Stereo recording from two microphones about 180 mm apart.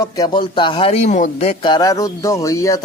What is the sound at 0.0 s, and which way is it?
Speech, 25° left (ahead or behind).